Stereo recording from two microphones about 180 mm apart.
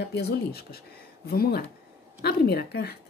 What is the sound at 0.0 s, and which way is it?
Speech, 65° left (ahead or behind).